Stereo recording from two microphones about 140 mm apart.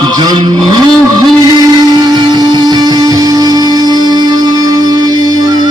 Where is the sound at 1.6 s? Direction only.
30° right (ahead or behind).